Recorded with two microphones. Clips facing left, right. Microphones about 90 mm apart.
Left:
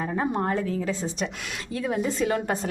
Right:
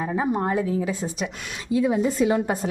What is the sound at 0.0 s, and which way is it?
Speech, 5° right (ahead or behind).